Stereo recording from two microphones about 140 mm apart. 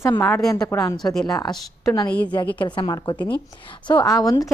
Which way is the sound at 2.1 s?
10° left (ahead or behind).